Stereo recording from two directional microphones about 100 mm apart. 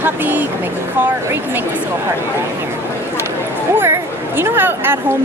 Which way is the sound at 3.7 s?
25° right (ahead or behind).